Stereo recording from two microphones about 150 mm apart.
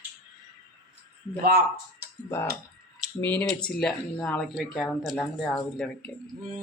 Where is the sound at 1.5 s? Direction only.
90° right.